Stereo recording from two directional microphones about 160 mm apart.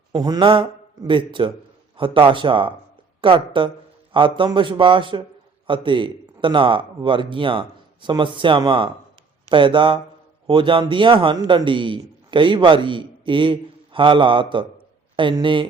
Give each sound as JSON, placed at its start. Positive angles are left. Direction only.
{"t": 0.1, "sound": "a man's voice", "side_deg": -25}